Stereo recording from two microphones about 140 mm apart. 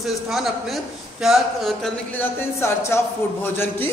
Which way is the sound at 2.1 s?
20° left (ahead or behind).